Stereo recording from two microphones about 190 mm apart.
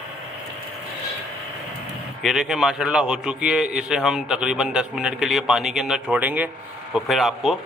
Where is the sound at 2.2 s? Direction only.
Centre (ahead or behind).